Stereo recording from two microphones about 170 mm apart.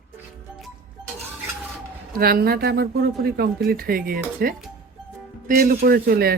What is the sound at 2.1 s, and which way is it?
Speech, 60° right (ahead or behind).